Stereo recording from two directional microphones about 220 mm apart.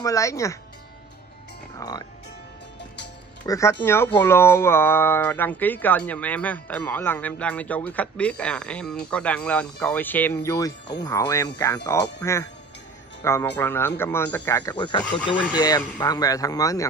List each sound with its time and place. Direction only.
0.0 s speech: 15° left (ahead or behind)
1.8 s speech: 15° left (ahead or behind)
3.4 s speech: 15° left (ahead or behind)